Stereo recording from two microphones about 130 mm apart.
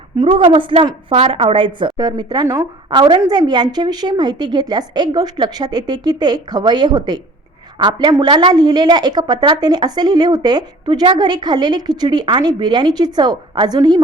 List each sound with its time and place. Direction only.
0.2 s a woman's voice: 45° right (ahead or behind)
2.0 s a woman's voice: 30° right (ahead or behind)